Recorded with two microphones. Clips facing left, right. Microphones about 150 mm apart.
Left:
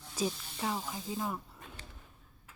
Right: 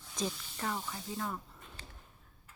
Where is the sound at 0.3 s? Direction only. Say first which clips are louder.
Left 2 dB; 10° left (ahead or behind).